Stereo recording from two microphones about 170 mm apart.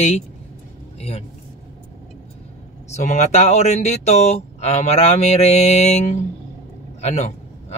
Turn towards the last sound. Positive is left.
turn(degrees=40)  # may be behind; listen again after turning